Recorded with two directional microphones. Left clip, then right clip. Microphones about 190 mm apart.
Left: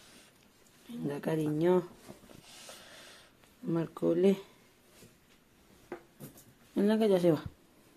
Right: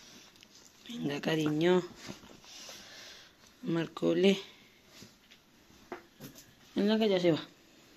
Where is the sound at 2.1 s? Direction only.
40° right (ahead or behind).